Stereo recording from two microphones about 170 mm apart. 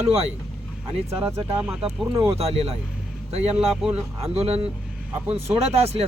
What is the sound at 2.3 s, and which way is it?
Speech, 35° right (ahead or behind).